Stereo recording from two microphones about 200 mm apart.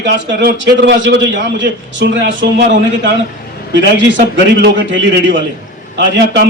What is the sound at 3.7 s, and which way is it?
A man's voice, 60° right (ahead or behind).